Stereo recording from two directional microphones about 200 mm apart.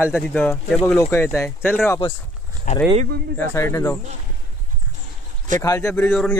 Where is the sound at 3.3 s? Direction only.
10° left (ahead or behind).